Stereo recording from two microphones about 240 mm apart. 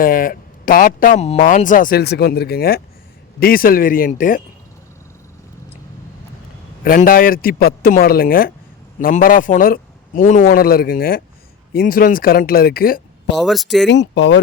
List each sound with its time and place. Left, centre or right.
0.0 s speech: left
6.8 s speech: left
13.3 s speech: centre
13.8 s speech: left